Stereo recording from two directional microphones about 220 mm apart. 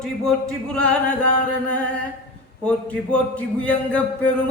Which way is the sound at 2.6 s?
5° left (ahead or behind).